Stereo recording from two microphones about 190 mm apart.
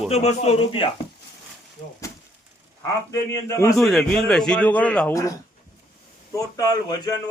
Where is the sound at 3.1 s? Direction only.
15° left (ahead or behind).